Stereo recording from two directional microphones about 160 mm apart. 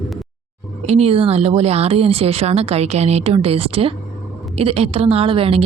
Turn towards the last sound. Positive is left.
turn(degrees=-35)  # may be behind; listen again after turning